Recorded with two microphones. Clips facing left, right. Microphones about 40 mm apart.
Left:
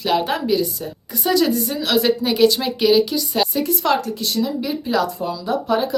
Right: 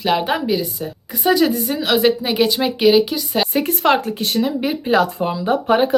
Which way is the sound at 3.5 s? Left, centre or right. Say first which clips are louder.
Right 6 dB; right.